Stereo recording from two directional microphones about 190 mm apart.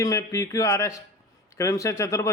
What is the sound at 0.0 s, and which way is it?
A man's voice, 15° left (ahead or behind).